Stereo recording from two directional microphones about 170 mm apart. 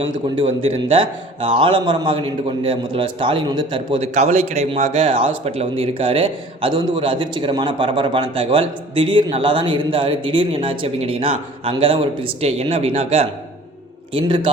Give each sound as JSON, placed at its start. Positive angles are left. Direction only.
{"t": 0.0, "sound": "a man's voice", "side_deg": -30}